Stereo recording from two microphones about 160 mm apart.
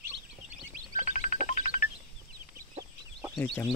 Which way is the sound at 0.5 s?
55° right (ahead or behind).